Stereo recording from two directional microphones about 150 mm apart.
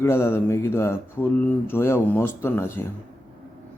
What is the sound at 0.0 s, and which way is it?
A man's voice, 15° left (ahead or behind).